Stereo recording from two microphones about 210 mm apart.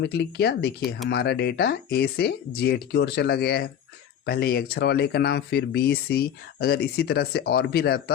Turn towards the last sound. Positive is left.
turn(degrees=50)  # may be behind; listen again after turning